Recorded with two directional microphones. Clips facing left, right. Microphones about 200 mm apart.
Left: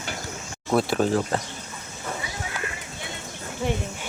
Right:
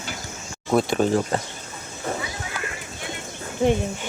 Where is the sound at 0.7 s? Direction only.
Centre (ahead or behind).